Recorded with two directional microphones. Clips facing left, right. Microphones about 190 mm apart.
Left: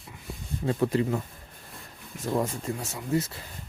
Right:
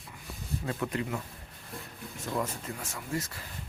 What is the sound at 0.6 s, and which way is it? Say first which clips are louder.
Speech: left 9 dB; 30° left (ahead or behind).